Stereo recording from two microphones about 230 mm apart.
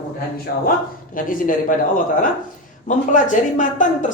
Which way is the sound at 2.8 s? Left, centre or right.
Left.